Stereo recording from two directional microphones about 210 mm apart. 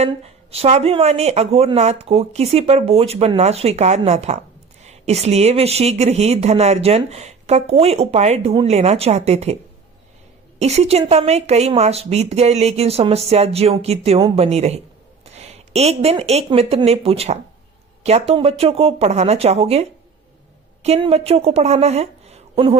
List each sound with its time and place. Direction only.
0.0 s speech: 30° right (ahead or behind)
10.6 s speech: 30° right (ahead or behind)